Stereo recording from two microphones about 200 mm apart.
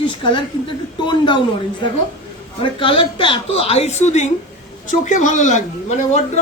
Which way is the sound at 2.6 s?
25° left (ahead or behind).